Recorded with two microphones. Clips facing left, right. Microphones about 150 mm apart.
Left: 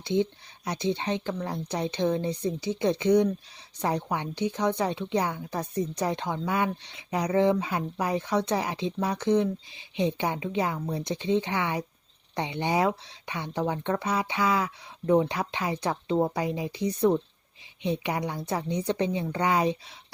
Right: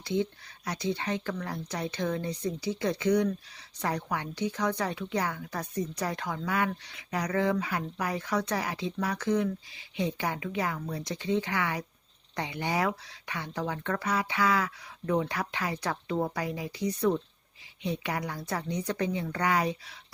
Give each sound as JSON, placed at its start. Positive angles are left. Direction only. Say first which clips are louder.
{"t": 0.0, "sound": "a woman's voice", "louder": "left 4 dB", "side_deg": 20}